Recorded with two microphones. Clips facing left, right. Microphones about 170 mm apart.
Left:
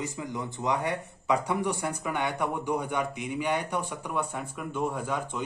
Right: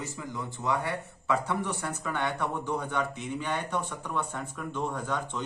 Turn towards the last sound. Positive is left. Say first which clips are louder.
# left 1 dB
turn(degrees=10)  # may be behind; listen again after turning